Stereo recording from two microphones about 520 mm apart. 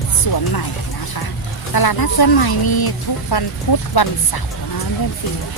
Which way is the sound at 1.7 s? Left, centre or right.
Left.